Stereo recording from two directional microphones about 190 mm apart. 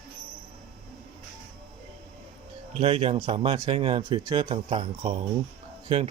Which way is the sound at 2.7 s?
30° right (ahead or behind).